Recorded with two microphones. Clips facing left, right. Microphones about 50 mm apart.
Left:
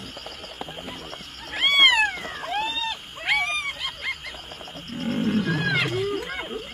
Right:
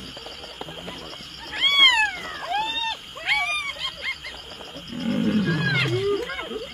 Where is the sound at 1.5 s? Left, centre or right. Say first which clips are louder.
Even; centre.